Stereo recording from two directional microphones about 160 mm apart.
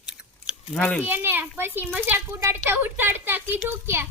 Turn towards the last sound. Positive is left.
turn(degrees=-15)  # may be behind; listen again after turning